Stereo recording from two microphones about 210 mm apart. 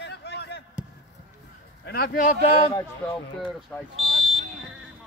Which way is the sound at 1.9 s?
45° left (ahead or behind).